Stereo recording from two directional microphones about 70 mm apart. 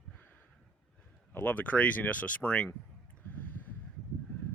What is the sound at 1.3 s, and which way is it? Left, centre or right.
Speech, left.